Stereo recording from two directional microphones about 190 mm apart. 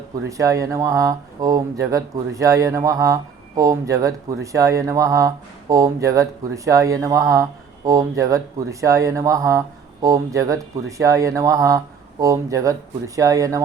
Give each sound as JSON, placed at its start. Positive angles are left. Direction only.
{"t": 0.3, "sound": "speech", "side_deg": -15}